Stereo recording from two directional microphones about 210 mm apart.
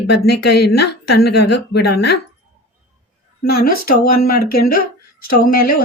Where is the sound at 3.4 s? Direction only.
45° left (ahead or behind).